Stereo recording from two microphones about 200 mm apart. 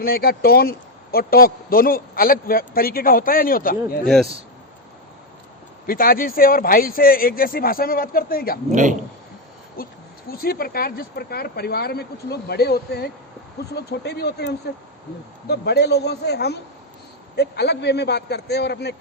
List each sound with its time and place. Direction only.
0.0 s a man's voice: 50° left (ahead or behind)
4.0 s speech: centre (ahead or behind)
5.8 s a man's voice: 45° left (ahead or behind)
8.7 s a man's voice: 40° right (ahead or behind)
9.8 s a man's voice: 50° left (ahead or behind)